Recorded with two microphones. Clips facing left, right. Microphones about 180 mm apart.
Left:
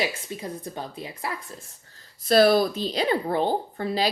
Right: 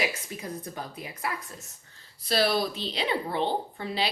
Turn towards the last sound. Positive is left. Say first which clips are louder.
# left 5 dB
turn(degrees=40)  # may be behind; listen again after turning